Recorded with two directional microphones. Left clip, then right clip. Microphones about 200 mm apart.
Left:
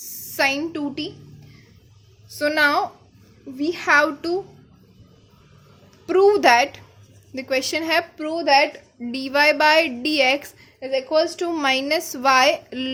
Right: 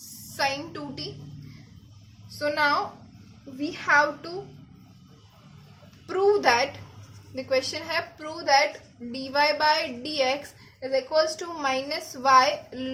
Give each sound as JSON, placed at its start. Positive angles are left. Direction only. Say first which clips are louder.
{"t": 0.3, "sound": "a woman's voice", "louder": "left 7 dB", "side_deg": 45}
{"t": 2.4, "sound": "a woman's voice", "louder": "left 5 dB", "side_deg": 50}
{"t": 6.1, "sound": "a woman's voice", "louder": "left 7 dB", "side_deg": 45}